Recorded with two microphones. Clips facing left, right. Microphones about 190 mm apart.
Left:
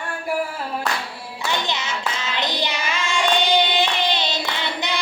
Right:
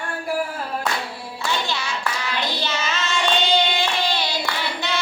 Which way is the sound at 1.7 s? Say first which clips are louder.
Even; 20° left (ahead or behind).